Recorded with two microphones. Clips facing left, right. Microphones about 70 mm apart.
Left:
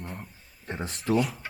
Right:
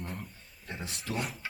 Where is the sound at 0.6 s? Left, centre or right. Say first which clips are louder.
Left 6 dB; left.